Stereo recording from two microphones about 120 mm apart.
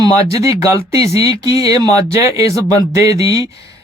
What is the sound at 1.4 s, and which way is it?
Speech, 30° right (ahead or behind).